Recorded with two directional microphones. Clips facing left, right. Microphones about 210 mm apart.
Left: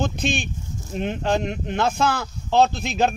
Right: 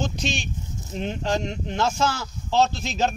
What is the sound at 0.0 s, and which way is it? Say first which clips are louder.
Speech: left 4 dB; 55° left (ahead or behind).